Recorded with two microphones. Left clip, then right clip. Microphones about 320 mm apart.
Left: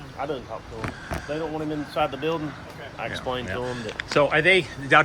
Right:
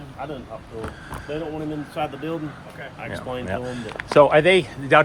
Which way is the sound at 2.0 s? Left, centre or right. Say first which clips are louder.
Left 3 dB; centre.